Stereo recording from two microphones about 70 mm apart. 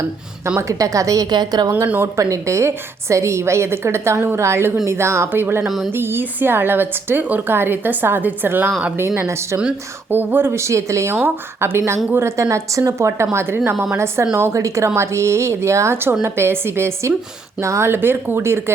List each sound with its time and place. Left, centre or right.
0.6 s a woman's voice: right
1.3 s a woman's voice: right
2.1 s a woman's voice: right
5.6 s speech: centre
5.9 s a woman's voice: right
9.0 s a woman's voice: right
10.1 s a woman's voice: right
11.1 s a woman's voice: right